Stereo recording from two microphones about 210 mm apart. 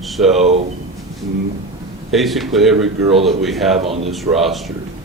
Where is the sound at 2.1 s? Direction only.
Centre (ahead or behind).